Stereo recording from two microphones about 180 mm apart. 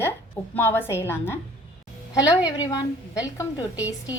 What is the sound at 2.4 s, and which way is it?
A woman's voice, 20° left (ahead or behind).